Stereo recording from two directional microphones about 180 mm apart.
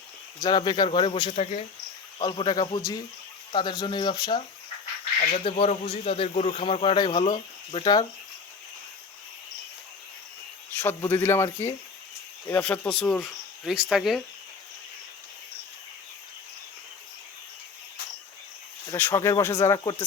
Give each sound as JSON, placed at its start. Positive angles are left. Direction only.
{"t": 0.3, "sound": "speech", "side_deg": 25}
{"t": 2.1, "sound": "speech", "side_deg": 25}
{"t": 5.4, "sound": "a man's voice", "side_deg": 35}
{"t": 10.8, "sound": "speech", "side_deg": 10}
{"t": 18.9, "sound": "speech", "side_deg": 10}